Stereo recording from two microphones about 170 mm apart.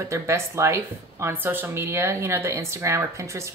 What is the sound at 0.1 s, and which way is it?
Speech, 15° right (ahead or behind).